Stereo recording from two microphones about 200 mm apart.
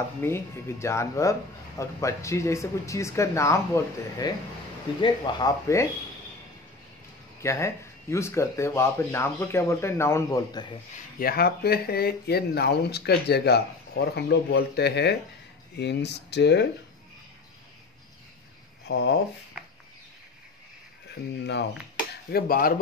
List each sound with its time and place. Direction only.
0.2 s speech: 15° left (ahead or behind)
7.4 s speech: 15° left (ahead or behind)
11.1 s speech: 50° left (ahead or behind)
18.9 s speech: 60° left (ahead or behind)
22.3 s speech: 45° left (ahead or behind)